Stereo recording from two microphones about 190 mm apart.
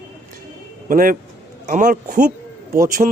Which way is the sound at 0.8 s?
45° right (ahead or behind).